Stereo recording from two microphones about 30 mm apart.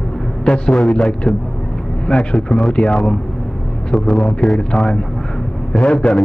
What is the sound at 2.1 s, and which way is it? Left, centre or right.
Speech, left.